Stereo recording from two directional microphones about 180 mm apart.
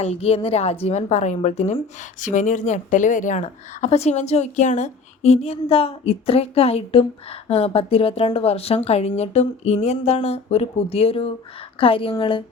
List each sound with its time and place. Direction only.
0.0 s a woman's voice: 35° left (ahead or behind)